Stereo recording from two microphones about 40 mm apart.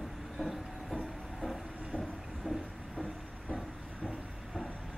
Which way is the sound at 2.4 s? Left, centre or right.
Right.